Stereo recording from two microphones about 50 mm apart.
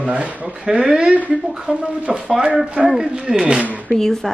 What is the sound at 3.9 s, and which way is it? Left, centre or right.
Speech, centre.